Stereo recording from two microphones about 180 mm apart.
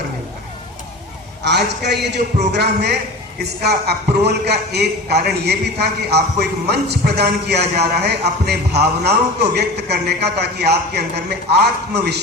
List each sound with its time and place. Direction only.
1.5 s a man's voice: 70° right (ahead or behind)